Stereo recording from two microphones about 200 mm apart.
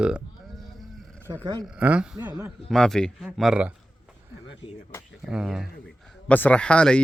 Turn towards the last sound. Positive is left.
turn(degrees=5)  # may be behind; listen again after turning